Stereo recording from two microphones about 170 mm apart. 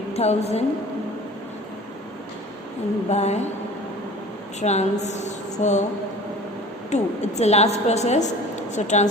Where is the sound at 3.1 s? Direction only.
40° left (ahead or behind).